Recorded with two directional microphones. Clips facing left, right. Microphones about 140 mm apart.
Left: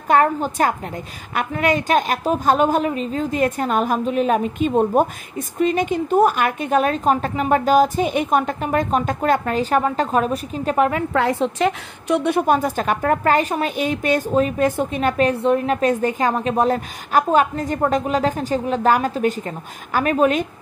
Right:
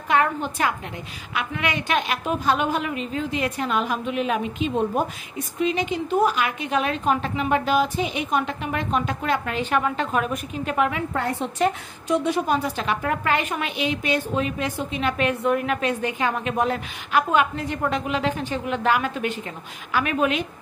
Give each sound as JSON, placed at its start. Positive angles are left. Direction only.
{"t": 0.1, "sound": "a woman's voice", "side_deg": 40}
{"t": 11.1, "sound": "a woman's voice", "side_deg": 90}